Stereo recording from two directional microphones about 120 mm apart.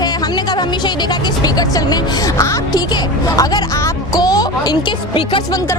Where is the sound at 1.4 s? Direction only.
35° left (ahead or behind).